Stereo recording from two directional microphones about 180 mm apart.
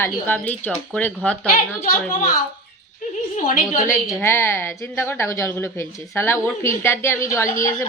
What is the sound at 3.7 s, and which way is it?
Speech, 45° left (ahead or behind).